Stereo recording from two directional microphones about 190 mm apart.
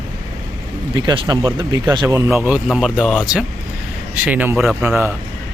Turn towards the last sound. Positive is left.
turn(degrees=-10)  # may be behind; listen again after turning